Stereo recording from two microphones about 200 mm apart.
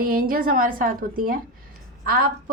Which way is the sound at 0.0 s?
45° right (ahead or behind).